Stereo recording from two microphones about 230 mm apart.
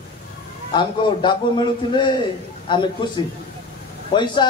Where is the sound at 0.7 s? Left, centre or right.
Left.